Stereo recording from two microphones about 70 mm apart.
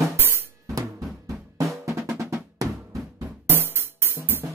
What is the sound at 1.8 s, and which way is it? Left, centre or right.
Drum, right.